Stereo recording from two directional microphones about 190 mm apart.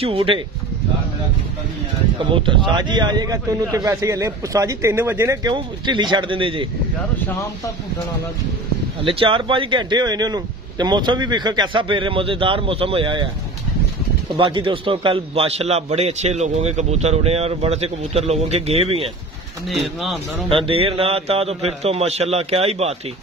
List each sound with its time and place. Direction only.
0.0 s a man's voice: 30° right (ahead or behind)
2.1 s a man's voice: 25° right (ahead or behind)
9.0 s a man's voice: 25° right (ahead or behind)
14.3 s a man's voice: 25° right (ahead or behind)
19.7 s speech: centre (ahead or behind)
20.4 s a man's voice: 30° right (ahead or behind)